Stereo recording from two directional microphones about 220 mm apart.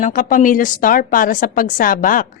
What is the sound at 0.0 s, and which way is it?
A woman's voice, 35° left (ahead or behind).